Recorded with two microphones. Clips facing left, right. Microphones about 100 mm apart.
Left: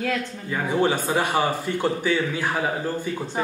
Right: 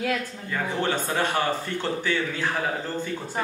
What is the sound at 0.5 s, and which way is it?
Speech, 15° left (ahead or behind).